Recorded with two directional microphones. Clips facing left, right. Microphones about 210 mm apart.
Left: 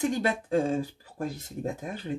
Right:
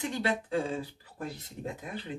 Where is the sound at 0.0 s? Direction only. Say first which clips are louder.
Left 4 dB; 45° left (ahead or behind).